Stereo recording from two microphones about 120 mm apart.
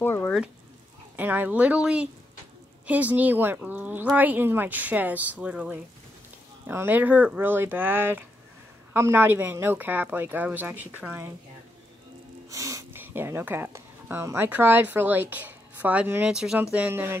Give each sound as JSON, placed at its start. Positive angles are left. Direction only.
{"t": 0.0, "sound": "a sound", "side_deg": 20}
{"t": 1.1, "sound": "speech", "side_deg": -15}
{"t": 12.4, "sound": "speech", "side_deg": -25}